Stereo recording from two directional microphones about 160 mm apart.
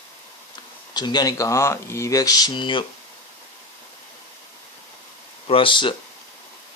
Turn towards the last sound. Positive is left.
turn(degrees=30)  # may be behind; listen again after turning